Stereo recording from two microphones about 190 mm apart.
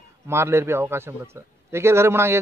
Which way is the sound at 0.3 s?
15° right (ahead or behind).